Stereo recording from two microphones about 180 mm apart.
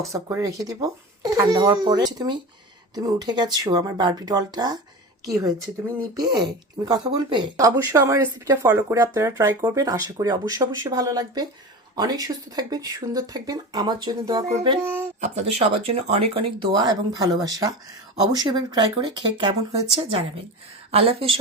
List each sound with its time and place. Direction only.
0.0 s speech: 15° right (ahead or behind)
7.9 s speech: 15° right (ahead or behind)
20.9 s speech: 35° right (ahead or behind)